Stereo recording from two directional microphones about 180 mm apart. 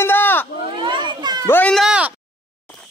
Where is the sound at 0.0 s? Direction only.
10° left (ahead or behind).